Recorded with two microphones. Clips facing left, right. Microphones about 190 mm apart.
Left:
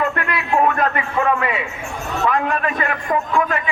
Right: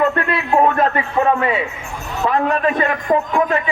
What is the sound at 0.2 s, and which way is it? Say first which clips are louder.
Music: right 3 dB; 30° right (ahead or behind).